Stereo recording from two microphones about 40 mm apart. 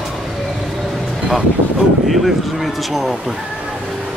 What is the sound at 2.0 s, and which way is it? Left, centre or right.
Speech, centre.